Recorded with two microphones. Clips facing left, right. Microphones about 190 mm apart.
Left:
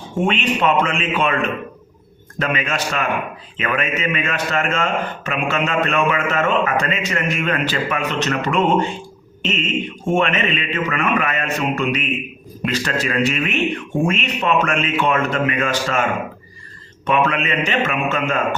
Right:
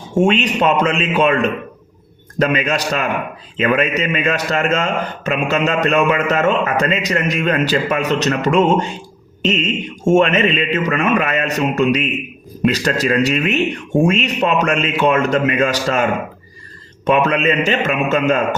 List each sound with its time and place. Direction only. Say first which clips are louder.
0.3 s a man's voice: right 3 dB; 40° right (ahead or behind)
17.1 s a man's voice: right 4 dB; 40° right (ahead or behind)